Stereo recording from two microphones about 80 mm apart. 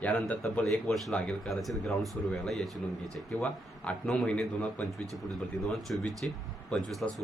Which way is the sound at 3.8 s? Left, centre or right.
Centre.